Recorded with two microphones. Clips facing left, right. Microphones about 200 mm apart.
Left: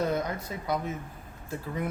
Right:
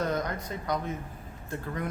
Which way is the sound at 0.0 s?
10° left (ahead or behind).